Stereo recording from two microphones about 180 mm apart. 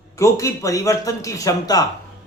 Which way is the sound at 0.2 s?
15° left (ahead or behind).